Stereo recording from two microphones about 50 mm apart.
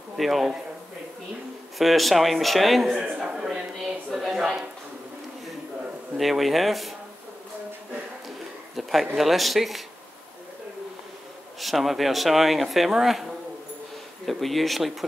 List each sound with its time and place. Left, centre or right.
0.2 s speech: centre
1.8 s speech: centre
2.9 s a man's voice: centre
3.2 s a sound: centre
6.1 s speech: centre
8.7 s speech: centre
11.6 s speech: centre